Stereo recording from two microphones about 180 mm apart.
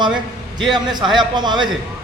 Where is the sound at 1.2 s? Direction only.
25° right (ahead or behind).